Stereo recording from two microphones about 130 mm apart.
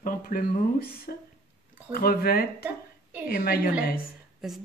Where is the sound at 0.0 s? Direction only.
90° left.